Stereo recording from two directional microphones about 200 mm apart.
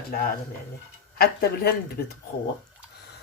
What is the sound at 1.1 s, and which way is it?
Speech, 50° left (ahead or behind).